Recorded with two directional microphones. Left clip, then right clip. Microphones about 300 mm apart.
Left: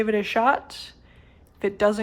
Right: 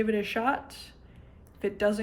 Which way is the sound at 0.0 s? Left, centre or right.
Centre.